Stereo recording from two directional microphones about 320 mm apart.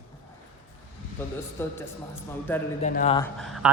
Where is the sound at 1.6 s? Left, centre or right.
Centre.